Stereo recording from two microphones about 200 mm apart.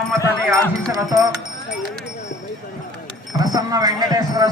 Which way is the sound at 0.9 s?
15° right (ahead or behind).